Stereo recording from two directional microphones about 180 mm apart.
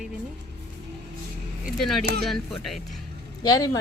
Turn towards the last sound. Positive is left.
turn(degrees=20)  # may be behind; listen again after turning